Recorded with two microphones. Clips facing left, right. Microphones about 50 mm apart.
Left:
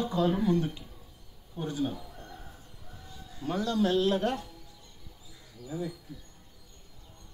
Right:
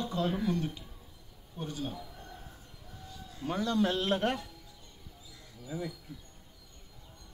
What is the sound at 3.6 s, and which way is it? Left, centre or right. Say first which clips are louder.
Speech: left 3 dB; right.